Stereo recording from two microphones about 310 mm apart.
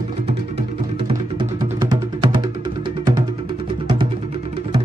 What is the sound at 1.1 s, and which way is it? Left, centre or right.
Music, centre.